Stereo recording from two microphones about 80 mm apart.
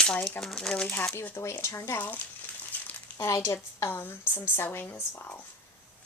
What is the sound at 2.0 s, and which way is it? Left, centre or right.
Speech, centre.